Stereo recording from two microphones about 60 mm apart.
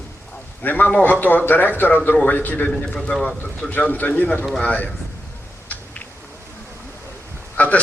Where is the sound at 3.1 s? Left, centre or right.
Centre.